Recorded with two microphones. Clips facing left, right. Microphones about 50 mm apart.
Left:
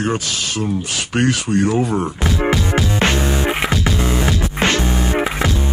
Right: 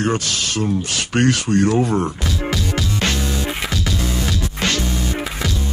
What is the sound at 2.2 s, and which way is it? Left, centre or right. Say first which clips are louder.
Music: left 5 dB; left.